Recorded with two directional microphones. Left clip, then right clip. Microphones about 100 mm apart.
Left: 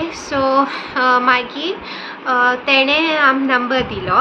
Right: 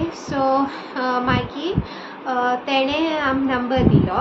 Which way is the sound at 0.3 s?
30° right (ahead or behind).